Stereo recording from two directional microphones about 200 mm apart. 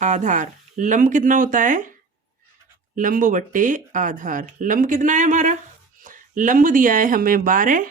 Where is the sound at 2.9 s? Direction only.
40° right (ahead or behind).